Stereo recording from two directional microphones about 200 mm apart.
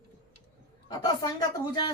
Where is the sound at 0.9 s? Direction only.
20° left (ahead or behind).